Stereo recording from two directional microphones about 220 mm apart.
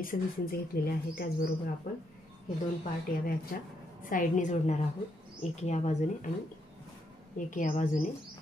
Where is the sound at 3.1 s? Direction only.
40° left (ahead or behind).